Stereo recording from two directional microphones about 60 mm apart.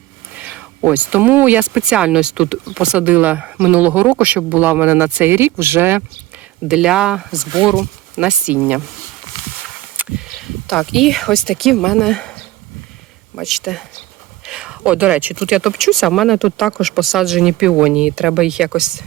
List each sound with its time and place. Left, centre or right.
0.9 s speech: right
1.8 s speech: centre
3.0 s speech: right
6.7 s speech: centre
8.1 s speech: centre
10.2 s speech: centre
13.4 s speech: centre
14.4 s a sound: centre
14.9 s speech: right
15.4 s speech: centre
15.7 s speech: centre